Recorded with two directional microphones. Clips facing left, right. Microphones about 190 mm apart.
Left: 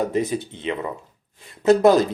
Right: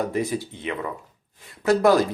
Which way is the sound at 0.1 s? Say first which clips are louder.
Left 2 dB; 20° left (ahead or behind).